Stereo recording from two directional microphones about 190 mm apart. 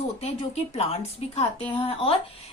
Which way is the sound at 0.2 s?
35° left (ahead or behind).